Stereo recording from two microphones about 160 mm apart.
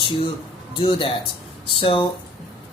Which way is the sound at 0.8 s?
35° left (ahead or behind).